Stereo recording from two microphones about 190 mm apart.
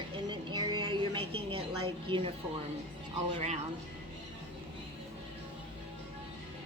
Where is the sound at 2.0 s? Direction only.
25° right (ahead or behind).